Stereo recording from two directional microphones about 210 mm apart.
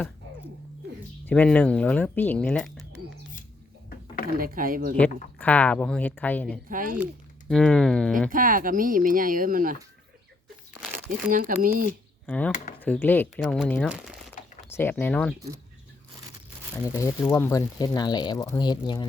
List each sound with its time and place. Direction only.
1.3 s speech: 5° left (ahead or behind)
3.8 s a sound: 40° left (ahead or behind)
4.4 s speech: 45° right (ahead or behind)
4.9 s speech: 5° left (ahead or behind)
6.7 s speech: 40° right (ahead or behind)
7.4 s speech: 5° left (ahead or behind)
8.3 s speech: 40° right (ahead or behind)
11.3 s speech: 40° right (ahead or behind)
12.2 s speech: 5° left (ahead or behind)
14.7 s speech: 10° left (ahead or behind)
16.8 s speech: 15° left (ahead or behind)